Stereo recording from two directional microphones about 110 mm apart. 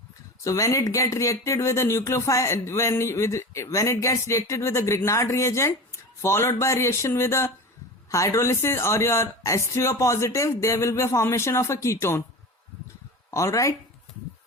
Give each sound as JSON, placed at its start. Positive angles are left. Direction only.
{"t": 0.4, "sound": "speech", "side_deg": 30}
{"t": 13.3, "sound": "speech", "side_deg": 30}